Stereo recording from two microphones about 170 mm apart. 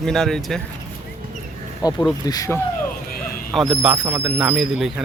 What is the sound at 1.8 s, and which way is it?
Speech, 25° left (ahead or behind).